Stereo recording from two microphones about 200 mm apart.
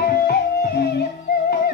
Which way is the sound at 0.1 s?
50° left (ahead or behind).